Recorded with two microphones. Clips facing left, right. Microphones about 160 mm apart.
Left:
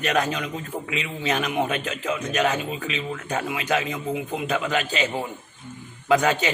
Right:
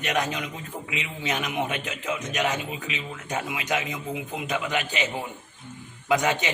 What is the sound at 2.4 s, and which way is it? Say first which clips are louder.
A man's voice: left 4 dB; 20° right (ahead or behind).